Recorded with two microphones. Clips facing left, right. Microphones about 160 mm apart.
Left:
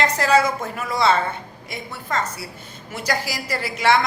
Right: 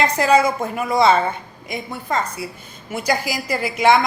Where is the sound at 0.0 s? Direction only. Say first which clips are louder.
Right 2 dB; 15° right (ahead or behind).